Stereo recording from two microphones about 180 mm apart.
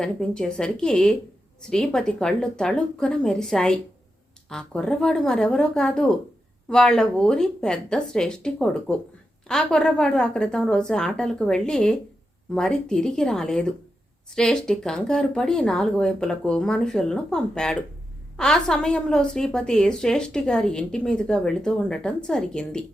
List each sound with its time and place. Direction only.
0.0 s a woman's voice: 5° left (ahead or behind)